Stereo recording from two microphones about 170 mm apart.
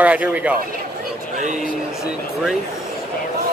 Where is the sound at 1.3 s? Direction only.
45° right (ahead or behind).